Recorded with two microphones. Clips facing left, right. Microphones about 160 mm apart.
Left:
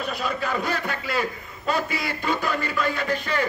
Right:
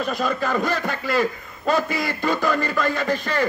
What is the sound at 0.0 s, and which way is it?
Music, 45° right (ahead or behind).